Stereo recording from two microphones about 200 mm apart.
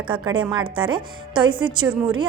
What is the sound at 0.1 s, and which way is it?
A woman's voice, 25° right (ahead or behind).